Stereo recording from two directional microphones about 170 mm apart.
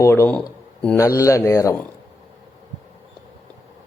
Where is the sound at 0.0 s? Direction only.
15° left (ahead or behind).